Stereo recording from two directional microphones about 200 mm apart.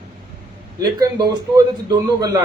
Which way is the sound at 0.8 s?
20° right (ahead or behind).